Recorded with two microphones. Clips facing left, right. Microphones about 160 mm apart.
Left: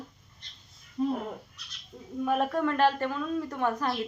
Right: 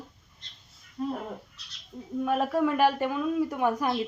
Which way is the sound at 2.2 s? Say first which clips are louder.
Right 1 dB; 5° right (ahead or behind).